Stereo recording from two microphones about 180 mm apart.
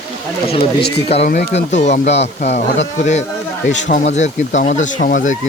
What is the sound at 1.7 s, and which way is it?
Speech, 40° left (ahead or behind).